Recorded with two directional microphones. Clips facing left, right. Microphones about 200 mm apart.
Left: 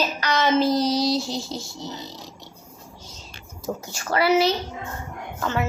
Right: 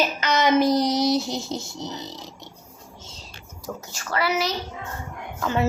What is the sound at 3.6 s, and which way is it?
Speech, 30° left (ahead or behind).